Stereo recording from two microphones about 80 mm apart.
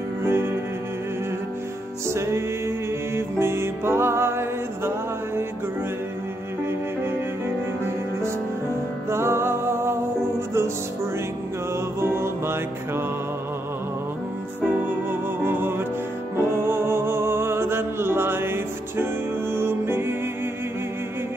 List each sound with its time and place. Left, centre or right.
0.2 s music: right
2.1 s music: right
9.1 s music: right
12.0 s music: right
15.0 s music: right